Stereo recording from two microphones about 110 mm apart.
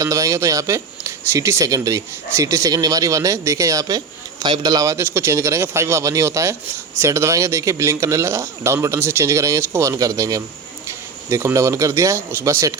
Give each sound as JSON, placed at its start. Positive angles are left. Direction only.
{"t": 0.0, "sound": "speech", "side_deg": -30}